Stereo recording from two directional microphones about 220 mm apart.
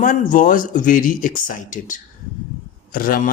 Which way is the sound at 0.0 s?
35° left (ahead or behind).